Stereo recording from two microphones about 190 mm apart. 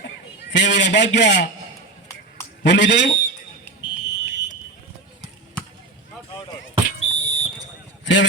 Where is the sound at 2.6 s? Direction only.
70° left (ahead or behind).